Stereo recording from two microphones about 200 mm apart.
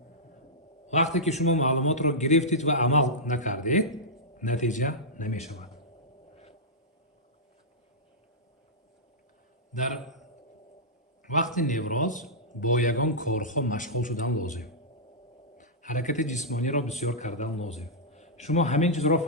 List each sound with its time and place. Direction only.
0.9 s a man's voice: 35° left (ahead or behind)
9.9 s a sound: centre (ahead or behind)
11.5 s a man's voice: 40° left (ahead or behind)